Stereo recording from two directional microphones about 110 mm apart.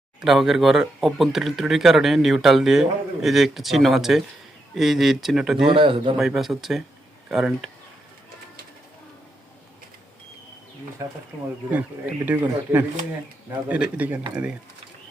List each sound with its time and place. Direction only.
0.2 s speech: 5° right (ahead or behind)
5.6 s a man's voice: 50° right (ahead or behind)
6.1 s speech: centre (ahead or behind)
11.7 s speech: 15° right (ahead or behind)